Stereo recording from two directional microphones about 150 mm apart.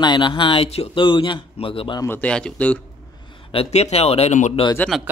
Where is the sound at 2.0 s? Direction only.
10° left (ahead or behind).